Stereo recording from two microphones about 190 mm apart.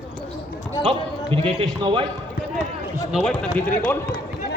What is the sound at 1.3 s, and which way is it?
Speech, 30° right (ahead or behind).